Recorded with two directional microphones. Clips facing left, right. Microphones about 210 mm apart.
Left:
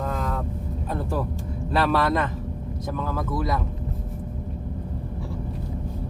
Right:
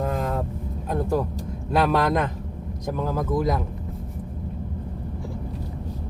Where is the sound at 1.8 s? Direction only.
15° right (ahead or behind).